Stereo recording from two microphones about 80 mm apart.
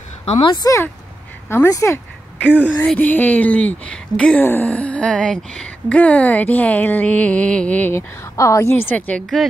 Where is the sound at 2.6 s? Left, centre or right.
Centre.